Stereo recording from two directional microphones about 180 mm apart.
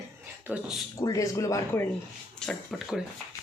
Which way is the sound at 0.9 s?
20° left (ahead or behind).